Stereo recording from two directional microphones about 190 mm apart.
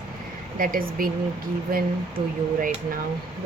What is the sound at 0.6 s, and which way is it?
A woman's voice, 50° right (ahead or behind).